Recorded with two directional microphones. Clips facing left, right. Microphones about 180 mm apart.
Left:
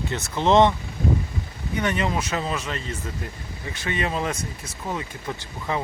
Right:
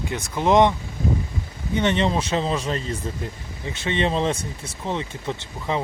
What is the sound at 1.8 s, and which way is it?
Speech, 25° right (ahead or behind).